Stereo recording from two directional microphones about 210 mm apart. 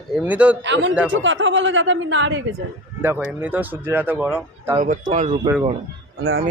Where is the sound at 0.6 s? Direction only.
60° right (ahead or behind).